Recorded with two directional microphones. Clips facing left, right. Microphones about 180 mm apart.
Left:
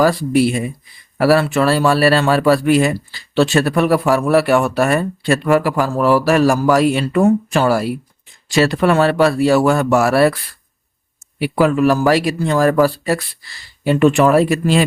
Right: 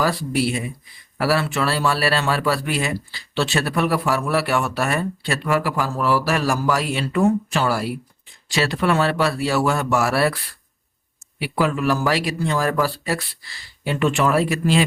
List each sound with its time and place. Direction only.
0.0 s speech: 45° left (ahead or behind)
11.3 s speech: 45° left (ahead or behind)